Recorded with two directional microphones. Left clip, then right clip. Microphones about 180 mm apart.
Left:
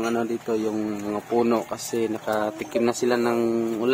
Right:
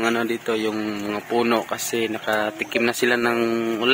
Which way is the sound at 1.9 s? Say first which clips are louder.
Right 2 dB; 10° left (ahead or behind).